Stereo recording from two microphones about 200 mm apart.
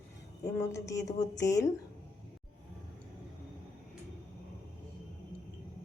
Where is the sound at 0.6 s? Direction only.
15° left (ahead or behind).